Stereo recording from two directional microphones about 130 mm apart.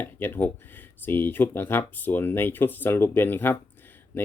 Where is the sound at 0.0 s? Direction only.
15° left (ahead or behind).